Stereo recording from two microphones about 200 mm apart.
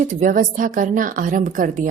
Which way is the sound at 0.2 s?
40° right (ahead or behind).